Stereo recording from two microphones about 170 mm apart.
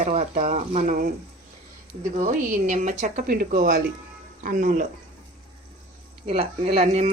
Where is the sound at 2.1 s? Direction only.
45° right (ahead or behind); by 3.8 s 60° right (ahead or behind).